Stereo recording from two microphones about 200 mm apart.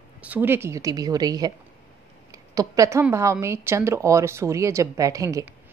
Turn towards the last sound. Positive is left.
turn(degrees=-15)  # may be behind; listen again after turning